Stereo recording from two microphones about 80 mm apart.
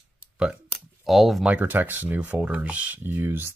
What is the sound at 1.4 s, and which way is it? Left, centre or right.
Speech, centre.